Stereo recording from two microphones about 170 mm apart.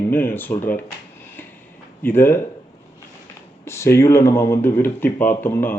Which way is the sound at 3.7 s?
15° left (ahead or behind).